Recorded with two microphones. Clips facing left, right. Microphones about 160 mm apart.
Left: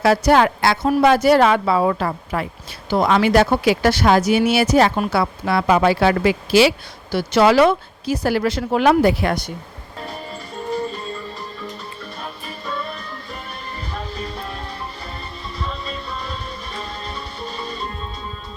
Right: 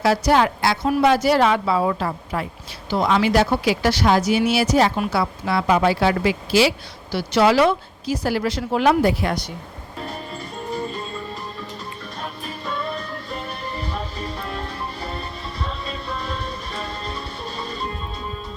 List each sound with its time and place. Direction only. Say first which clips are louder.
0.0 s speech: left 3 dB; 55° left (ahead or behind)
2.9 s speech: left 3 dB; 55° left (ahead or behind)